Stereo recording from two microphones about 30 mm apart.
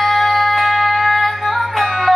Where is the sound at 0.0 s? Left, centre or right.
Centre.